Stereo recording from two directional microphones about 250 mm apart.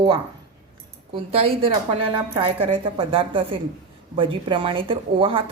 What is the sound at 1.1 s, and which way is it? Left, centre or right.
A woman's voice, right.